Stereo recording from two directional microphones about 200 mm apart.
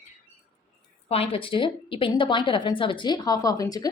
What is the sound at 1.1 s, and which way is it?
A woman's voice, 30° left (ahead or behind).